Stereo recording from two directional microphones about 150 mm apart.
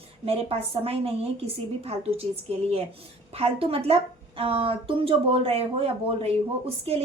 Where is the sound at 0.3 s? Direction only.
40° right (ahead or behind).